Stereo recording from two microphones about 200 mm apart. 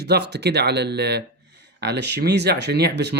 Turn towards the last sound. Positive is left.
turn(degrees=-55)  # may be behind; listen again after turning